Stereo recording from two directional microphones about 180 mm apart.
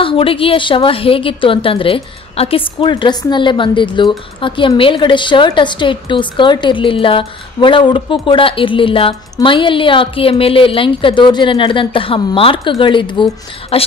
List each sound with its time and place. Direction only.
0.0 s a woman's voice: 30° left (ahead or behind)